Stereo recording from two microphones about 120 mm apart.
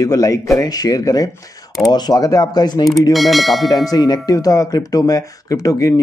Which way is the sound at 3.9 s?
35° left (ahead or behind).